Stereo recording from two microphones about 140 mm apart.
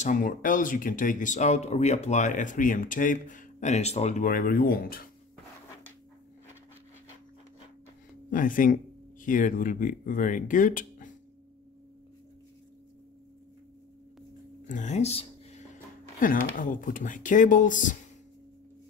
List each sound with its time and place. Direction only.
0.0 s speech: 70° left (ahead or behind); by 4.2 s 50° left (ahead or behind)
4.2 s speech: 90° left
8.3 s speech: 75° left (ahead or behind)
14.7 s speech: 60° left (ahead or behind)
16.2 s speech: 75° left (ahead or behind)